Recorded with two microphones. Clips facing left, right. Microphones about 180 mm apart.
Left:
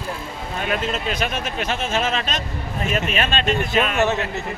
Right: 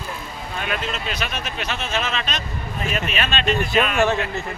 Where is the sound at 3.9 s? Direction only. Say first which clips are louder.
Even; 20° left (ahead or behind).